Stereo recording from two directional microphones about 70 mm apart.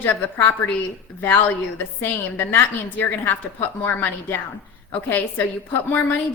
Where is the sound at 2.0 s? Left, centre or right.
Left.